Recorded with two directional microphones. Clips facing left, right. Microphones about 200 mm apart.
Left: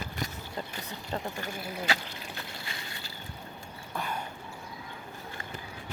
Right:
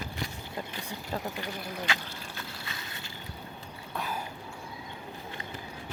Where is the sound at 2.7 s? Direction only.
25° left (ahead or behind).